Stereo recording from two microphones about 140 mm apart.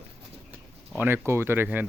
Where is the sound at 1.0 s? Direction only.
15° right (ahead or behind).